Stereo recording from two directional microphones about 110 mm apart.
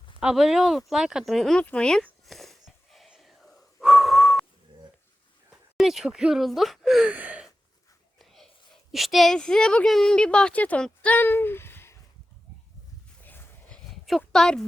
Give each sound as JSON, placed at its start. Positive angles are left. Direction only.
{"t": 0.2, "sound": "speech", "side_deg": -5}
{"t": 2.2, "sound": "wheeze", "side_deg": 0}
{"t": 5.7, "sound": "speech", "side_deg": -5}
{"t": 7.1, "sound": "gasp", "side_deg": -15}
{"t": 8.2, "sound": "whispering", "side_deg": 0}
{"t": 8.9, "sound": "speech", "side_deg": 0}
{"t": 13.2, "sound": "a sound", "side_deg": 15}
{"t": 14.3, "sound": "speech", "side_deg": 5}